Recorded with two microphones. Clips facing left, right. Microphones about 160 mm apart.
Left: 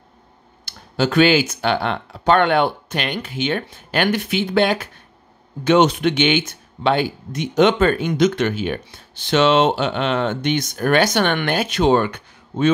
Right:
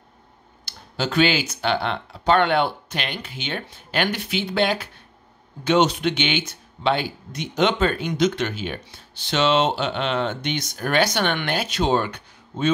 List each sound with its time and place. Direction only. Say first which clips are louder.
0.7 s speech: left 6 dB; 55° left (ahead or behind)